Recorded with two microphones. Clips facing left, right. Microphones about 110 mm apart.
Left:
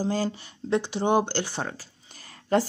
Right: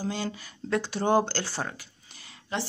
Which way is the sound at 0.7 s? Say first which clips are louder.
Left 2 dB; 20° left (ahead or behind).